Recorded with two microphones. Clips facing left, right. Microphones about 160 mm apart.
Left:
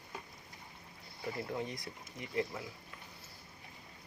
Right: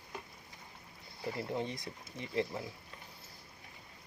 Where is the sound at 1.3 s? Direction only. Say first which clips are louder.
Right 2 dB; 25° right (ahead or behind).